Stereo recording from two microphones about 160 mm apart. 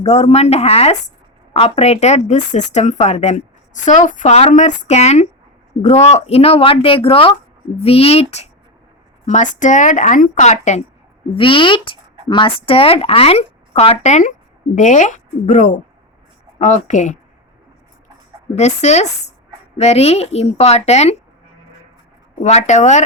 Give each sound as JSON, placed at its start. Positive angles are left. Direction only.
{"t": 0.0, "sound": "speech", "side_deg": 45}
{"t": 11.3, "sound": "speech", "side_deg": 30}
{"t": 18.5, "sound": "speech", "side_deg": 45}
{"t": 22.4, "sound": "speech", "side_deg": 45}